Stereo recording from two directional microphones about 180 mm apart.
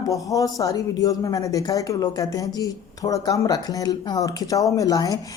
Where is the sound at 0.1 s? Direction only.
20° left (ahead or behind).